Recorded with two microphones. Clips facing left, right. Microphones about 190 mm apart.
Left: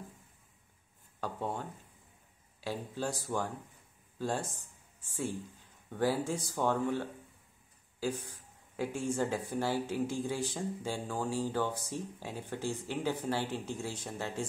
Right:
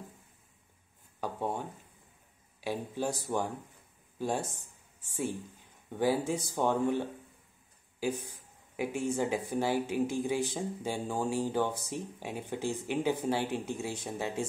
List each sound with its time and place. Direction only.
1.2 s a sound: 15° right (ahead or behind)
2.6 s speech: 15° right (ahead or behind)
5.9 s speech: 15° right (ahead or behind)